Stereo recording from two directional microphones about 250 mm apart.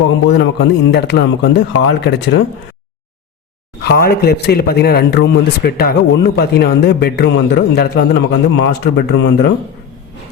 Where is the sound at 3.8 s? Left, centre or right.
Left.